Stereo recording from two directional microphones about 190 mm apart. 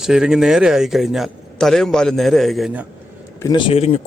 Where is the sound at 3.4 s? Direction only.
20° left (ahead or behind).